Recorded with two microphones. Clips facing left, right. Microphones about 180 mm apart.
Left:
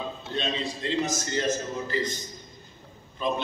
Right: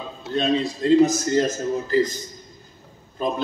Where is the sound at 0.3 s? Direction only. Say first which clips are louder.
Right 10 dB; 45° right (ahead or behind).